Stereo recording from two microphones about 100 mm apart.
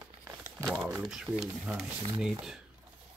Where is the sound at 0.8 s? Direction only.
10° right (ahead or behind).